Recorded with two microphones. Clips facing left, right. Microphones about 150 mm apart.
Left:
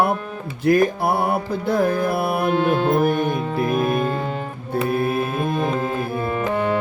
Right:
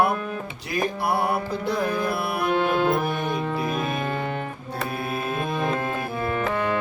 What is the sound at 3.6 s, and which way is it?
Music, 5° left (ahead or behind).